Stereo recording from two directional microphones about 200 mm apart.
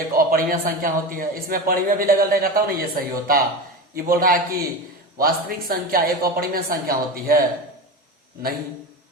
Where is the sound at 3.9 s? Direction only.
45° right (ahead or behind).